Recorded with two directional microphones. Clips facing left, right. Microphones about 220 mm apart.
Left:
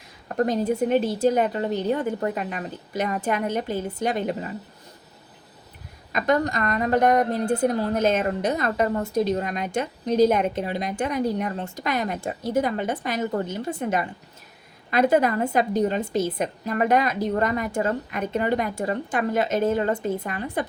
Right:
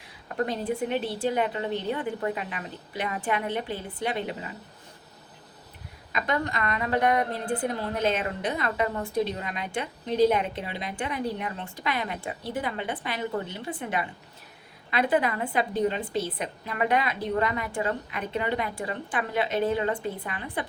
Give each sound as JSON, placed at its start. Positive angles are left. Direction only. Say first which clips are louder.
{"t": 0.3, "sound": "a woman's voice", "louder": "left 6 dB", "side_deg": 40}
{"t": 6.1, "sound": "a woman's voice", "louder": "left 6 dB", "side_deg": 45}